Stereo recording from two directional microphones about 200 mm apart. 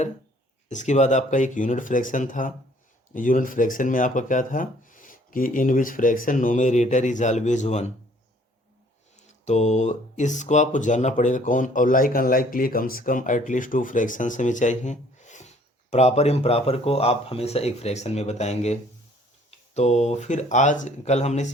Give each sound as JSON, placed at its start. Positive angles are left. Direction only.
{"t": 0.7, "sound": "speech", "side_deg": 35}
{"t": 9.1, "sound": "speech", "side_deg": 35}